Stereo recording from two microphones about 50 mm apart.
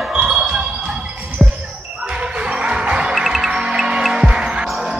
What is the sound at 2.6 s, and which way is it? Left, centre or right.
Music, centre.